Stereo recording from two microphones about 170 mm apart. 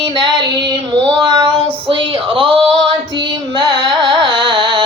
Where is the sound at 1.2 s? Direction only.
30° right (ahead or behind).